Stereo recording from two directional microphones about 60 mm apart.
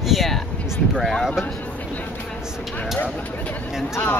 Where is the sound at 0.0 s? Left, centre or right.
Centre.